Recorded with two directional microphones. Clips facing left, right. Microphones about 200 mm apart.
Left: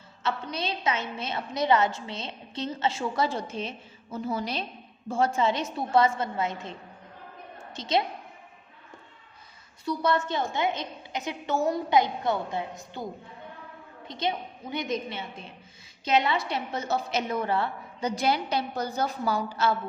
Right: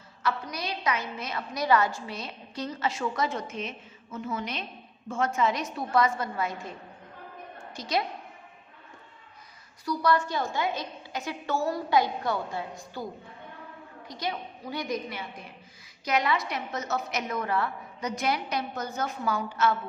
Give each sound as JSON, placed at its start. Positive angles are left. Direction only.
{"t": 0.2, "sound": "a woman's voice", "side_deg": 25}
{"t": 9.8, "sound": "a woman's voice", "side_deg": 25}
{"t": 14.1, "sound": "a woman's voice", "side_deg": 25}